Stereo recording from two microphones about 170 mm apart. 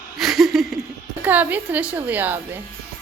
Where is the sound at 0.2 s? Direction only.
Centre (ahead or behind).